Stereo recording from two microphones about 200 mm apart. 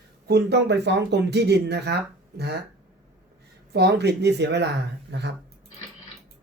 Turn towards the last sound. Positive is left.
turn(degrees=-60)  # may be behind; listen again after turning